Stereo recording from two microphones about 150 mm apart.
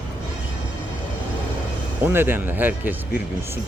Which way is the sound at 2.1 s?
15° right (ahead or behind).